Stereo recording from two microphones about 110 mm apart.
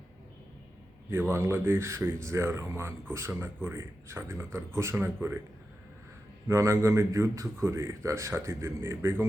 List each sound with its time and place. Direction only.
1.3 s speech: 25° right (ahead or behind)
6.5 s speech: 25° right (ahead or behind)